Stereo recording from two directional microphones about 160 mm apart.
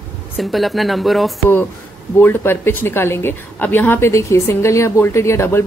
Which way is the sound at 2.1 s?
15° left (ahead or behind).